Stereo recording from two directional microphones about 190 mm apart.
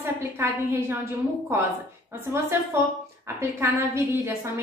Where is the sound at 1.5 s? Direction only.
15° right (ahead or behind).